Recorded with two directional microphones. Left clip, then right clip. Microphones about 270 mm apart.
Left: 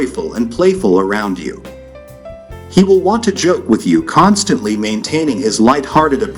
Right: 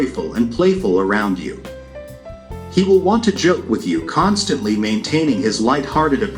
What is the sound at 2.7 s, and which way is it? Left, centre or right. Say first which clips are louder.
Speech: left 3 dB; left.